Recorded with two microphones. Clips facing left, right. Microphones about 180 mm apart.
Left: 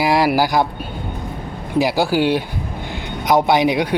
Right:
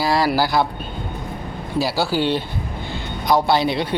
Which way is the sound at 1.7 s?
15° left (ahead or behind).